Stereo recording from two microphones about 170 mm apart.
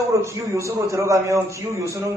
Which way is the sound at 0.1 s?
15° right (ahead or behind).